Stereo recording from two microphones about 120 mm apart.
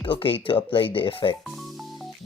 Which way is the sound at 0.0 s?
50° left (ahead or behind).